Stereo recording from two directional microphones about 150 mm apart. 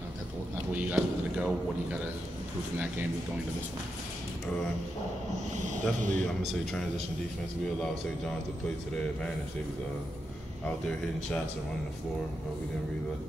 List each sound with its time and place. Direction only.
0.7 s a sound: 10° right (ahead or behind)
5.6 s speech: 55° right (ahead or behind)
6.4 s speech: centre (ahead or behind)
10.9 s speech: 5° left (ahead or behind)